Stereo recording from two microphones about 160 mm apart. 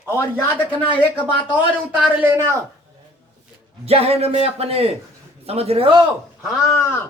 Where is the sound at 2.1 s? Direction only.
15° right (ahead or behind).